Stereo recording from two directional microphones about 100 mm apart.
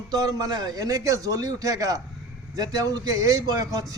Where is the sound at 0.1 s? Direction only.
40° right (ahead or behind).